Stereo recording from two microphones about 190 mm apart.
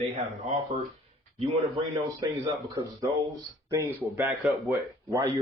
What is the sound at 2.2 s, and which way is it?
Speech, 20° right (ahead or behind).